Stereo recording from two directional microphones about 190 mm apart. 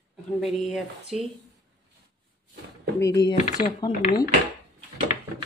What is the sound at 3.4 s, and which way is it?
Speech, 40° left (ahead or behind).